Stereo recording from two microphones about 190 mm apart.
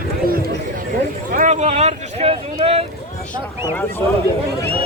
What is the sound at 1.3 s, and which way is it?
Speech, 40° right (ahead or behind).